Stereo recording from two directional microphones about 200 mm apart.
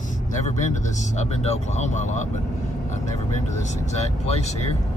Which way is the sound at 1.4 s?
35° left (ahead or behind).